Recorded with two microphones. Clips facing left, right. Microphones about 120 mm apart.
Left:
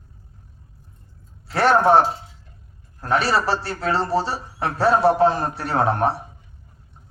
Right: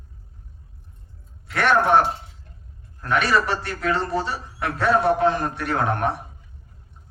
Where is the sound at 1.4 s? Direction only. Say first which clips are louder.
Left 3 dB; 30° left (ahead or behind).